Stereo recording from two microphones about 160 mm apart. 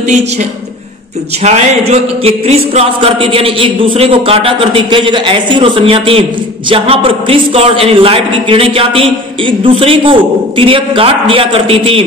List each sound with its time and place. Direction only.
1.4 s a man's voice: 45° right (ahead or behind)